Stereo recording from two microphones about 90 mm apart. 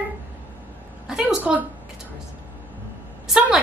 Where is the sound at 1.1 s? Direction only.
5° right (ahead or behind).